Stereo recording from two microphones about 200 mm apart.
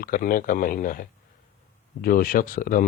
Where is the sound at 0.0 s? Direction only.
45° left (ahead or behind).